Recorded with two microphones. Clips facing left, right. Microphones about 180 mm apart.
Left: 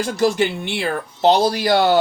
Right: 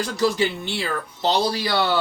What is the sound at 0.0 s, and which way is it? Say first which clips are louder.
Speech: left 3 dB; 50° left (ahead or behind).